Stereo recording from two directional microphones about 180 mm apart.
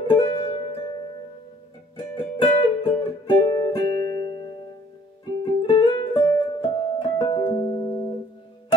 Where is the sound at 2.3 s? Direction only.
30° left (ahead or behind).